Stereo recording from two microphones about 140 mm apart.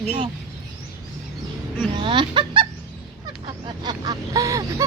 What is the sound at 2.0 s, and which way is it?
Speech, 35° right (ahead or behind).